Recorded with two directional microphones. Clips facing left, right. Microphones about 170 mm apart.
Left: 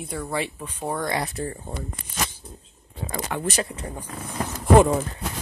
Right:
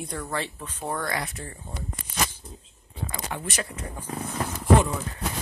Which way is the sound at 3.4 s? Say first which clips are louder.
Left 6 dB; 30° left (ahead or behind).